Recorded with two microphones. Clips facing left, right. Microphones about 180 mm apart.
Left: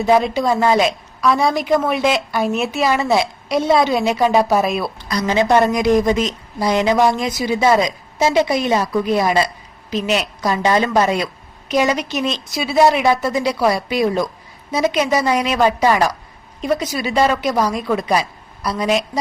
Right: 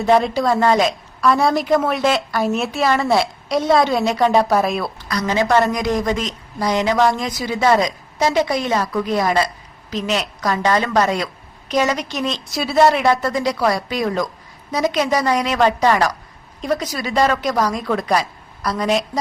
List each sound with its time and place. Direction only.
0.0 s a woman's voice: centre (ahead or behind)
5.1 s a woman's voice: 20° left (ahead or behind)
13.3 s a woman's voice: 20° left (ahead or behind)
13.7 s a woman's voice: 10° left (ahead or behind)
15.3 s speech: 15° left (ahead or behind)
17.1 s a woman's voice: 20° left (ahead or behind)
17.3 s a woman's voice: 5° left (ahead or behind)